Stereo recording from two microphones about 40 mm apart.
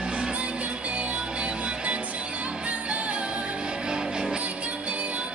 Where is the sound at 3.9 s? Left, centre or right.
Right.